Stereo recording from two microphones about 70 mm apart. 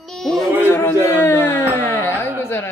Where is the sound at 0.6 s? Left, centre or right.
Left.